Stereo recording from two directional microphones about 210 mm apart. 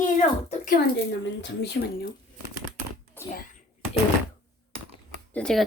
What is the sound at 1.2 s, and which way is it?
Speech, 55° left (ahead or behind).